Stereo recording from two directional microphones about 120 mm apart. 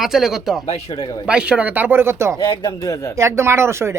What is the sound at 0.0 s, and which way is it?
Speech, 5° right (ahead or behind).